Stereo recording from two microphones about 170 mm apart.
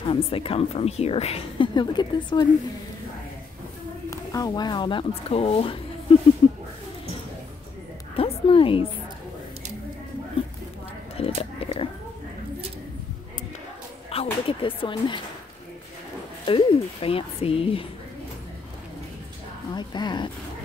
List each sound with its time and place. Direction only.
0.0 s a woman's voice: 30° left (ahead or behind)
4.1 s speech: 20° left (ahead or behind)
8.2 s a sound: 30° left (ahead or behind)
11.1 s a sound: 35° left (ahead or behind)
14.1 s speech: 30° left (ahead or behind)
16.4 s a woman's voice: 30° left (ahead or behind)
19.7 s speech: 25° left (ahead or behind)